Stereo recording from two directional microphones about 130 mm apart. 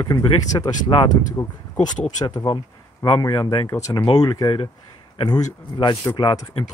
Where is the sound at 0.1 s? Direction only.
30° left (ahead or behind).